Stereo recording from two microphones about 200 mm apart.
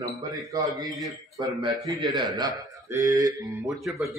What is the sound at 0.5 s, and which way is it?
A man's voice, 20° right (ahead or behind).